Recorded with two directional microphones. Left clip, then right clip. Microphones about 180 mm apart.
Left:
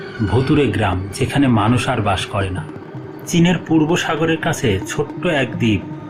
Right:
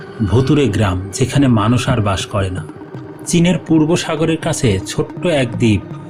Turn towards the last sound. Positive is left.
turn(degrees=-40)  # may be behind; listen again after turning